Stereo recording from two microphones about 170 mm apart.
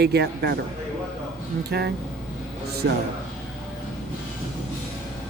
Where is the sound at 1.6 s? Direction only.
70° right (ahead or behind).